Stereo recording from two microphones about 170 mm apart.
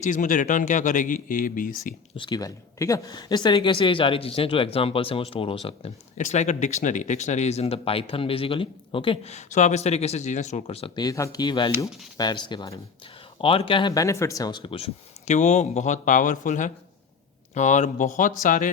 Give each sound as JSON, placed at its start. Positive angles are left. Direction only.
{"t": 0.0, "sound": "speech", "side_deg": 50}
{"t": 2.1, "sound": "speech", "side_deg": 25}
{"t": 6.1, "sound": "speech", "side_deg": 45}